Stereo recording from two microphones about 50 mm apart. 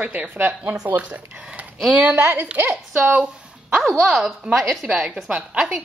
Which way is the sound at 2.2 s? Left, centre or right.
Right.